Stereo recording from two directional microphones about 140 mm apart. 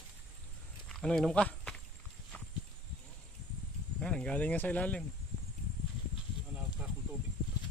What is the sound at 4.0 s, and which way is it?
Speech, 5° left (ahead or behind).